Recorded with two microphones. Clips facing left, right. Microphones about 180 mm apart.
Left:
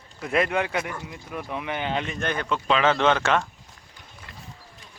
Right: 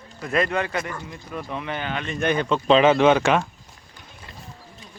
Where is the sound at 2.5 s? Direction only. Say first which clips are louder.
Right 7 dB; 25° right (ahead or behind).